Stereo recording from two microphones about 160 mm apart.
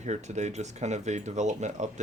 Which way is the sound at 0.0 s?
45° right (ahead or behind).